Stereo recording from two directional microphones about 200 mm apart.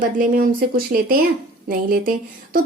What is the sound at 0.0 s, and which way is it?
A woman's voice, 40° right (ahead or behind).